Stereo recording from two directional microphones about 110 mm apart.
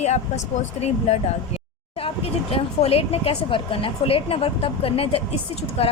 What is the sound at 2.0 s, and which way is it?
Speech, 60° left (ahead or behind).